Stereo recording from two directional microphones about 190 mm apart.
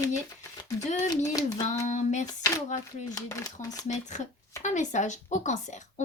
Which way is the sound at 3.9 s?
40° left (ahead or behind).